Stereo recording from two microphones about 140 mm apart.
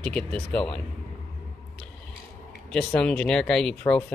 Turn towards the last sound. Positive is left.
turn(degrees=5)  # may be behind; listen again after turning